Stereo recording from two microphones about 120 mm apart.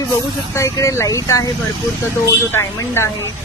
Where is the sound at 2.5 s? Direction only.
20° left (ahead or behind).